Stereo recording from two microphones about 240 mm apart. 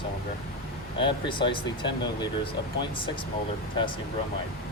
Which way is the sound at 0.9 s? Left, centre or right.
Left.